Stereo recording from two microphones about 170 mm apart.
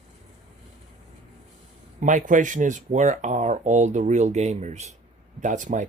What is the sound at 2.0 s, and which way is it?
Speech, 50° right (ahead or behind).